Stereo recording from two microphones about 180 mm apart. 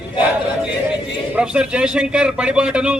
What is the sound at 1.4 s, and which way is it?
A man's voice, 5° right (ahead or behind).